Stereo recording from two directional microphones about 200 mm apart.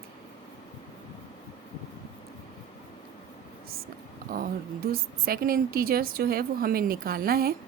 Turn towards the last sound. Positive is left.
turn(degrees=-50)  # may be behind; listen again after turning